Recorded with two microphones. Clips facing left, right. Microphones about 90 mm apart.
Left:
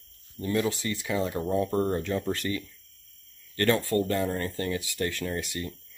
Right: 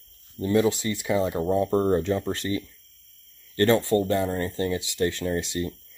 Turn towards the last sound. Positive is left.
turn(degrees=-25)  # may be behind; listen again after turning